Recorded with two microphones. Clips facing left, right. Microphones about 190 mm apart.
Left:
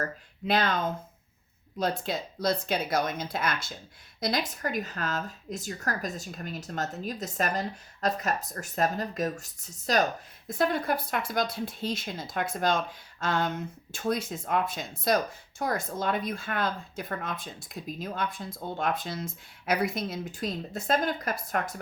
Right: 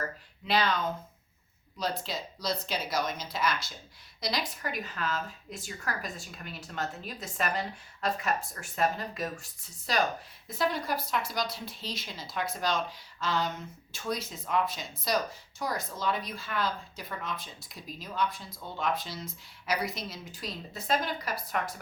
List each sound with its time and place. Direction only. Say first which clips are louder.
0.4 s speech: left 2 dB; 50° left (ahead or behind)
10.6 s speech: left 3 dB; 55° left (ahead or behind)